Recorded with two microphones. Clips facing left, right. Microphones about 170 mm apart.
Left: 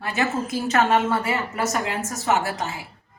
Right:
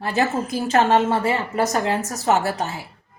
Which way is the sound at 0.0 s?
35° right (ahead or behind).